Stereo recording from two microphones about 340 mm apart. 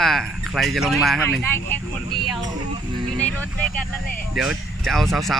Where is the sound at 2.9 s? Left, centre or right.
Centre.